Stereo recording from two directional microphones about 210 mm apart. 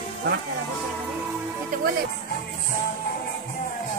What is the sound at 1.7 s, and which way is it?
Speech, 40° right (ahead or behind).